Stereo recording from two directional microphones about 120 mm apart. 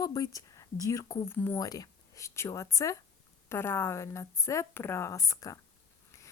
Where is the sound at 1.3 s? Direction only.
15° left (ahead or behind).